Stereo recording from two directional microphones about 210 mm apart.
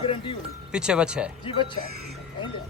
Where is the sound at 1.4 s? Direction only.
25° left (ahead or behind).